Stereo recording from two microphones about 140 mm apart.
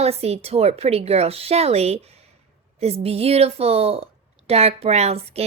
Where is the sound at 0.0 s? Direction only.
45° right (ahead or behind).